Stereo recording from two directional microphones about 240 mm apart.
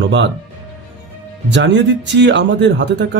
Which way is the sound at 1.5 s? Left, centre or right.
Right.